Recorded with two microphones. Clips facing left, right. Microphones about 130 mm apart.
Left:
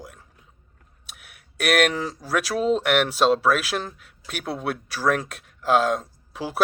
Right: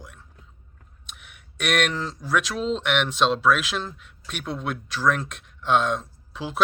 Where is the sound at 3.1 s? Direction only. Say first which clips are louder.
Left 2 dB; 45° left (ahead or behind).